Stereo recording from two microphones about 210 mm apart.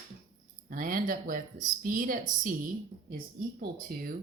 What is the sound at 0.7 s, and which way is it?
Speech, 40° right (ahead or behind).